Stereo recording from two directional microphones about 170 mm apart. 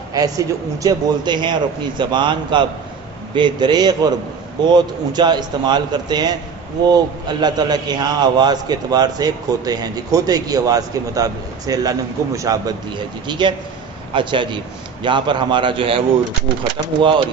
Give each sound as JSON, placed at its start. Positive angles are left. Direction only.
{"t": 0.1, "sound": "a man's voice", "side_deg": -20}